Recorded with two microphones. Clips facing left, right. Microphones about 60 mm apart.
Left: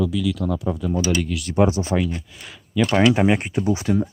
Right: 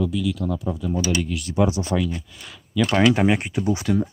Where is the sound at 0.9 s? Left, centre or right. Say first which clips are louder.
Left 1 dB; left.